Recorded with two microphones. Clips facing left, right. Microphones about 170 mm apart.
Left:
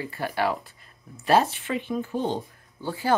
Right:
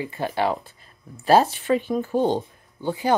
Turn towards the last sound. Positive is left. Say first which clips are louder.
# right 4 dB
turn(degrees=-20)  # may be behind; listen again after turning